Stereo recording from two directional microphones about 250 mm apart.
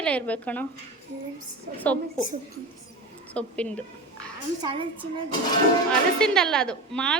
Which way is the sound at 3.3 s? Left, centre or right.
Centre.